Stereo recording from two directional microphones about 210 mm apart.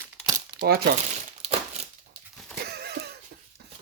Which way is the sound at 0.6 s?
45° right (ahead or behind).